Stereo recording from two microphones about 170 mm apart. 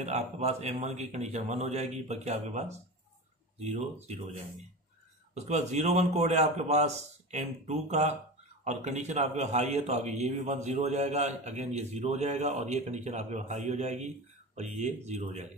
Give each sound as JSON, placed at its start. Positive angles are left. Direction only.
{"t": 0.0, "sound": "a man's voice", "side_deg": -40}